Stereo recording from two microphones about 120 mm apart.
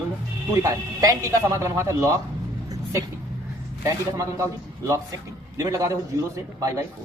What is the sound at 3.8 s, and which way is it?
Speech, 25° right (ahead or behind).